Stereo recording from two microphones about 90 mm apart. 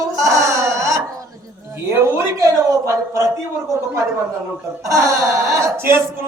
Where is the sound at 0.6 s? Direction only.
35° right (ahead or behind).